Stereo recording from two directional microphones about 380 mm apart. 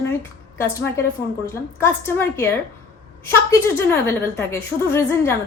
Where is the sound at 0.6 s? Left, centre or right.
Centre.